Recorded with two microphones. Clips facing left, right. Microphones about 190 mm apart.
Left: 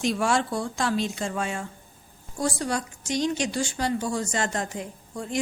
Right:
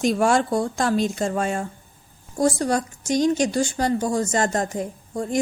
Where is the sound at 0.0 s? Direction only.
45° right (ahead or behind).